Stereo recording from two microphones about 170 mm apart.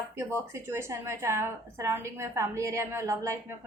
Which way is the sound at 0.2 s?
15° right (ahead or behind).